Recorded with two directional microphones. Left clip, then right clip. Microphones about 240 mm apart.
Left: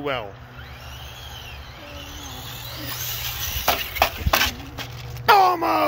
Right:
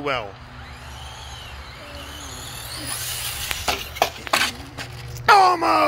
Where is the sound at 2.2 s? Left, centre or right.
Centre.